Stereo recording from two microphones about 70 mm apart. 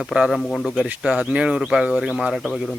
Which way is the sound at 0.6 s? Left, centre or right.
Centre.